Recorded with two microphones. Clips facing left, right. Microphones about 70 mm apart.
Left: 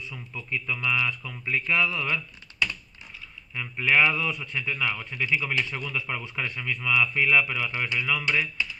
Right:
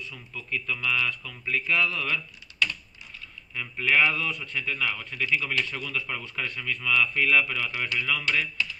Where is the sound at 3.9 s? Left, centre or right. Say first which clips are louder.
Left 1 dB; centre.